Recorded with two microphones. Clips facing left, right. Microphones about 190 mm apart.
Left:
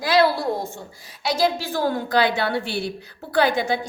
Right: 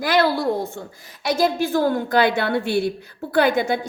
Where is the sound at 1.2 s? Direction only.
50° right (ahead or behind).